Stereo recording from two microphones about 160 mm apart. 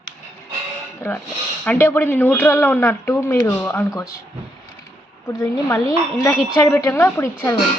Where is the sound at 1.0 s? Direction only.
15° left (ahead or behind).